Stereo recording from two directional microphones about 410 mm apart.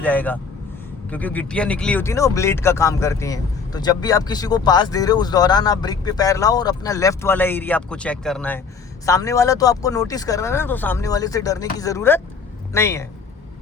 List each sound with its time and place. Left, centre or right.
0.0 s speech: centre